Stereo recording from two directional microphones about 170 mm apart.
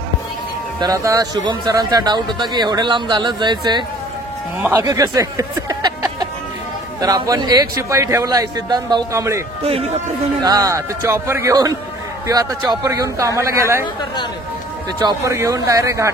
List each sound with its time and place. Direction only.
0.7 s a man's voice: 20° right (ahead or behind)
10.4 s a man's voice: 20° right (ahead or behind)
15.0 s speech: 20° right (ahead or behind)